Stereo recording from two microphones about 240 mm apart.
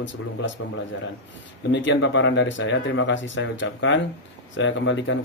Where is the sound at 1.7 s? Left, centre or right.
Left.